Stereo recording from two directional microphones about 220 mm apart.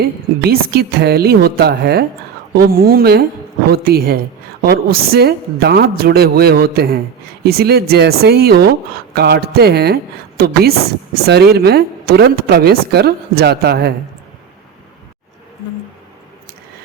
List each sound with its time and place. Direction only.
0.0 s a woman's voice: 45° right (ahead or behind)